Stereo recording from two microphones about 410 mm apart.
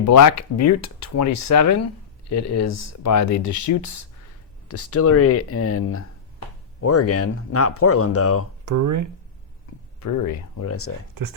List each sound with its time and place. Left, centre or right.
0.0 s speech: left
8.6 s speech: right
10.0 s speech: left